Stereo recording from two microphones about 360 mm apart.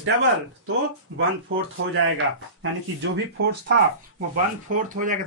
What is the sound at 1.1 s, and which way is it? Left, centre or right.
Speech, right.